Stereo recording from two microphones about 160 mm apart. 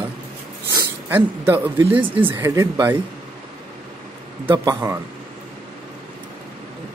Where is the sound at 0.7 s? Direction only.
25° right (ahead or behind).